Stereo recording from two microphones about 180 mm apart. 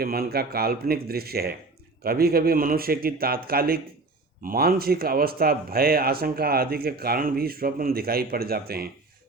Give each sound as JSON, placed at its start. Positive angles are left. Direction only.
{"t": 0.0, "sound": "speech", "side_deg": -55}